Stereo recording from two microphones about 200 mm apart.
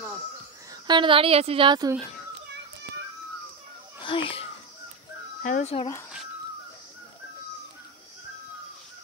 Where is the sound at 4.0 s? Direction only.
25° left (ahead or behind).